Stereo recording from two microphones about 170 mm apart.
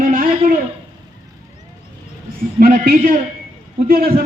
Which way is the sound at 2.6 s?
60° right (ahead or behind).